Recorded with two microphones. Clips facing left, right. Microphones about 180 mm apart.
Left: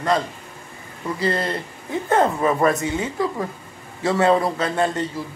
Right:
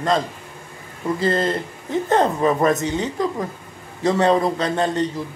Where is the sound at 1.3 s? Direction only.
20° right (ahead or behind).